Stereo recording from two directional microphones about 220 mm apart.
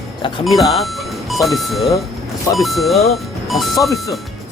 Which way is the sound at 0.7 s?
Centre (ahead or behind).